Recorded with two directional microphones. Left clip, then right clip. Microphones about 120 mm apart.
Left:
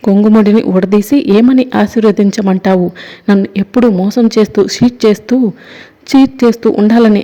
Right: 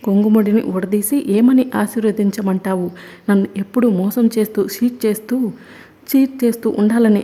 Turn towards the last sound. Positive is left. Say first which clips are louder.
# left 7 dB
turn(degrees=30)  # may be behind; listen again after turning